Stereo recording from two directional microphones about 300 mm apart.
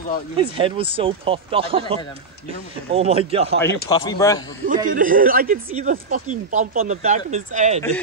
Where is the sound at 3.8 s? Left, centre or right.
Centre.